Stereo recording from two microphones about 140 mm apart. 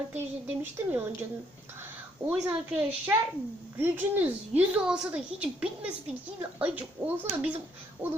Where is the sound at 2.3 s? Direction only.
10° right (ahead or behind).